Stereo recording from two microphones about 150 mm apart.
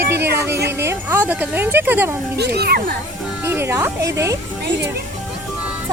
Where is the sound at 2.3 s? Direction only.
90° right.